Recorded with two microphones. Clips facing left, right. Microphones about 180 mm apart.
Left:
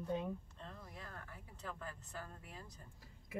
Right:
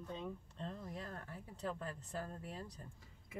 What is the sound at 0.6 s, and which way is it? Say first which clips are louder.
Speech: right 6 dB; 30° right (ahead or behind).